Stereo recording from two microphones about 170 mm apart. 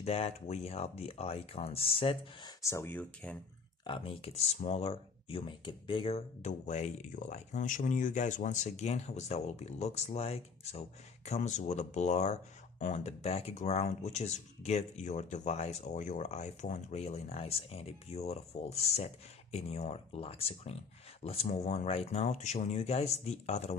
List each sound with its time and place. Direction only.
0.0 s speech: 40° left (ahead or behind)
2.6 s speech: 15° left (ahead or behind)
3.8 s speech: 30° left (ahead or behind)